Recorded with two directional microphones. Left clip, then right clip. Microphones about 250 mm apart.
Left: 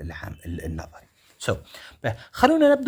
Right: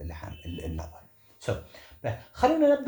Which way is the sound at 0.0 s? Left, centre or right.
Left.